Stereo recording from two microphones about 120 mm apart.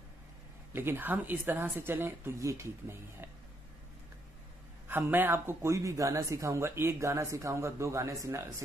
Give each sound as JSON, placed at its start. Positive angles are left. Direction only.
{"t": 0.7, "sound": "speech", "side_deg": -15}
{"t": 4.8, "sound": "speech", "side_deg": -15}